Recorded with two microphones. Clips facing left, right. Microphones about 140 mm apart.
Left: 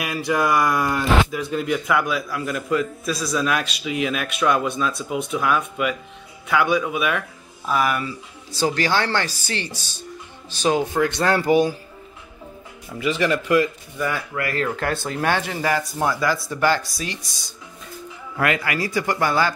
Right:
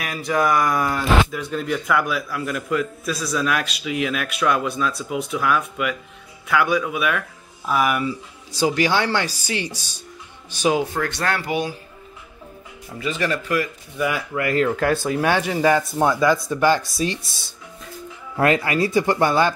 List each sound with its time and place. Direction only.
0.0 s speech: 5° left (ahead or behind)
11.0 s speech: 15° left (ahead or behind)
11.2 s speech: 40° left (ahead or behind)
13.9 s speech: 10° right (ahead or behind)
14.8 s speech: 10° right (ahead or behind)
18.4 s speech: 30° right (ahead or behind)